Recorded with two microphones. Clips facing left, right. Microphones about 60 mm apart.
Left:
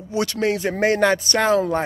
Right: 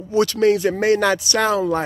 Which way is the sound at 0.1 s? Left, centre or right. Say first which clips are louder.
Right 5 dB; left.